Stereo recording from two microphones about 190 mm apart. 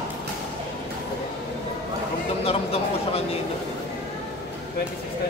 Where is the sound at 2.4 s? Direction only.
30° left (ahead or behind).